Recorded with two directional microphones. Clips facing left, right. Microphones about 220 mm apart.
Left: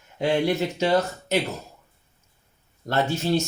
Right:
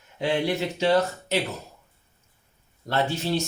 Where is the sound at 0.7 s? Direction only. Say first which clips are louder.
Even; 45° left (ahead or behind).